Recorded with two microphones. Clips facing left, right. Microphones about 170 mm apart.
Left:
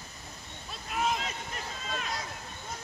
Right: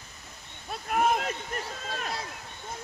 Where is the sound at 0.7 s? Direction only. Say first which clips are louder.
Right 6 dB; 55° right (ahead or behind).